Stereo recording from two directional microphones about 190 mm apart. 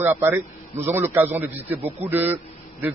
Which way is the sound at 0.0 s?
10° right (ahead or behind).